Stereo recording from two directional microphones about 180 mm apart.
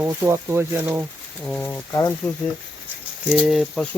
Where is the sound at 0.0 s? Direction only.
10° right (ahead or behind).